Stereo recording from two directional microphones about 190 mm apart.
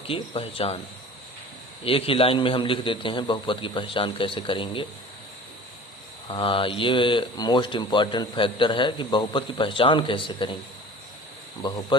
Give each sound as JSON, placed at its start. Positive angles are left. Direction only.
{"t": 0.1, "sound": "speech", "side_deg": 30}
{"t": 1.8, "sound": "speech", "side_deg": 30}
{"t": 6.2, "sound": "speech", "side_deg": 25}
{"t": 11.6, "sound": "speech", "side_deg": 20}